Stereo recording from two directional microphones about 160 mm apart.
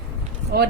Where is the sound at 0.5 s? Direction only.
75° right (ahead or behind).